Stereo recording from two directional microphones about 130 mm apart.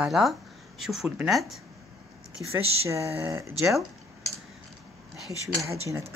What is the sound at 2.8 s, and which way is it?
Speech, 20° right (ahead or behind).